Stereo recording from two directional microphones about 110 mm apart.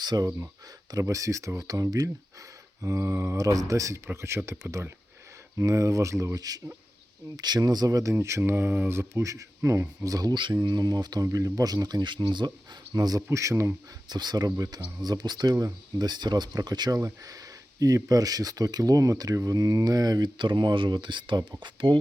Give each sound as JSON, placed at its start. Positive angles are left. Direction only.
{"t": 0.0, "sound": "speech", "side_deg": -40}
{"t": 14.1, "sound": "speech", "side_deg": -40}